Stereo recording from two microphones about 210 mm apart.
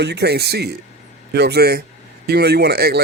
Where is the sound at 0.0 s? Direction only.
55° right (ahead or behind).